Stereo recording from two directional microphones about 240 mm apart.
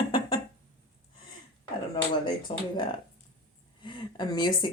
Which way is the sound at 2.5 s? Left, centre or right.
Left.